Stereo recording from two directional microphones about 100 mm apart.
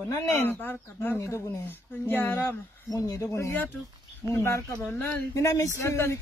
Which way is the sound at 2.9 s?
35° left (ahead or behind).